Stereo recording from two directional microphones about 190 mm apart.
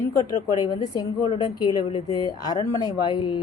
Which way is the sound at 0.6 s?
20° left (ahead or behind).